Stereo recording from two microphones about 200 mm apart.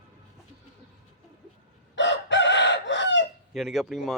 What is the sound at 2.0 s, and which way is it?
Chicken, 65° left (ahead or behind).